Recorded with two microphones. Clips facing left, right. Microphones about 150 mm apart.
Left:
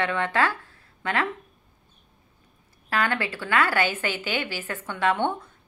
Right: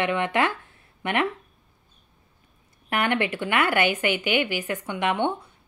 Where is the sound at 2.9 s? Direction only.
20° right (ahead or behind).